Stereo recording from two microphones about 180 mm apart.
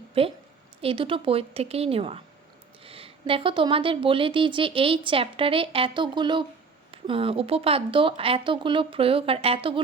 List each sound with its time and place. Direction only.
0.1 s a woman's voice: 30° right (ahead or behind)